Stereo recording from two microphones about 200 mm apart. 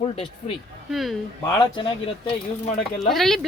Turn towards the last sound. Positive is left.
turn(degrees=0)  # may be behind; listen again after turning